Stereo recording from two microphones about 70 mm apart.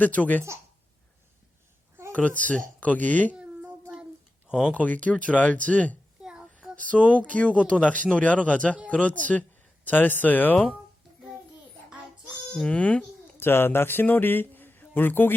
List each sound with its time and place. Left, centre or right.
0.0 s speech: left
2.1 s speech: left
3.3 s a sound: right
4.4 s speech: centre
4.7 s speech: centre
6.2 s child singing: centre
7.1 s speech: centre
12.6 s speech: centre
13.3 s speech: left